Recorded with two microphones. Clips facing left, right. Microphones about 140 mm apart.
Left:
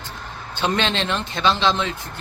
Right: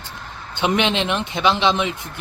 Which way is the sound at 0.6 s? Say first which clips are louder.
Right 3 dB; 15° right (ahead or behind).